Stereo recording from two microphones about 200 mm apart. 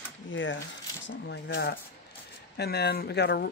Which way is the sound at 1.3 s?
60° left (ahead or behind).